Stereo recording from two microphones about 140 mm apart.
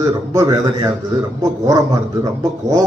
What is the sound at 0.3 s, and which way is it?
Speech, 25° right (ahead or behind).